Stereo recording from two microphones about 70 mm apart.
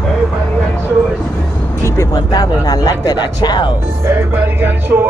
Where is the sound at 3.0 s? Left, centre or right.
Left.